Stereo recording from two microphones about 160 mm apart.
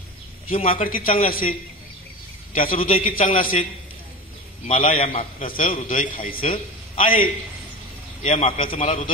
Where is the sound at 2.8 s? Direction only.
35° left (ahead or behind).